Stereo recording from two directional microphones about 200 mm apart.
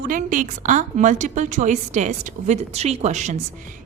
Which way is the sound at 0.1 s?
40° right (ahead or behind).